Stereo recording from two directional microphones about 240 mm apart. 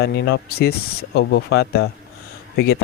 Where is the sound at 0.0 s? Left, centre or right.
Left.